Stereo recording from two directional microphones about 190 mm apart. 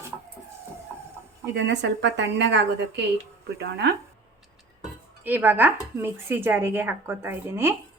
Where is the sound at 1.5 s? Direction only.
65° right (ahead or behind).